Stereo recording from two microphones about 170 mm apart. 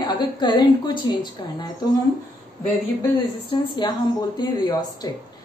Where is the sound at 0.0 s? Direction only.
25° left (ahead or behind).